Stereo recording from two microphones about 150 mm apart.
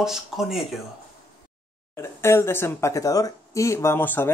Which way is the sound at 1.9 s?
15° left (ahead or behind).